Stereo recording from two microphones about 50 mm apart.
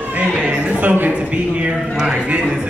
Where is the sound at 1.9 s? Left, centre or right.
Centre.